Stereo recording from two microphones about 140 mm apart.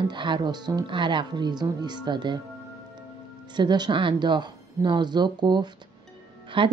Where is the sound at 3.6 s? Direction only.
30° right (ahead or behind).